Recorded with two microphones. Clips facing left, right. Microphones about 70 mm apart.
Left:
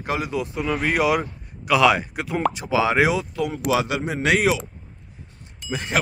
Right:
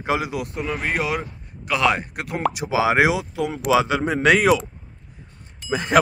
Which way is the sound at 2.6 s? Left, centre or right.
Right.